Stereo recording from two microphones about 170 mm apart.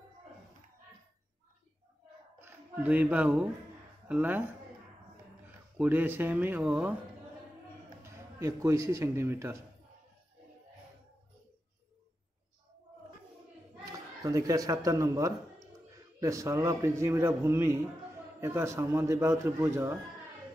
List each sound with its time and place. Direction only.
2.3 s a man's voice: 10° right (ahead or behind)
5.8 s a man's voice: 10° right (ahead or behind)
8.0 s a man's voice: 20° right (ahead or behind)
13.9 s a man's voice: 20° right (ahead or behind)